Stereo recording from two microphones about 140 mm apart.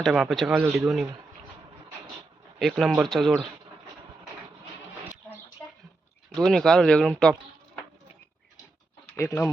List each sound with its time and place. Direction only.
0.0 s speech: centre (ahead or behind)
2.6 s speech: centre (ahead or behind)
6.3 s speech: 5° left (ahead or behind)
9.1 s speech: 20° left (ahead or behind)